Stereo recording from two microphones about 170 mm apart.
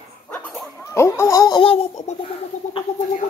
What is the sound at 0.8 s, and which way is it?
Baby laughter, 15° left (ahead or behind).